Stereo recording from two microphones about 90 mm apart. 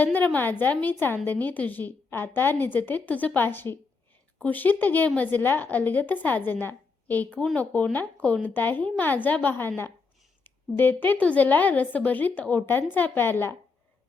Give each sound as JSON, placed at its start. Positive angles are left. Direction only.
{"t": 0.0, "sound": "a woman's voice", "side_deg": 20}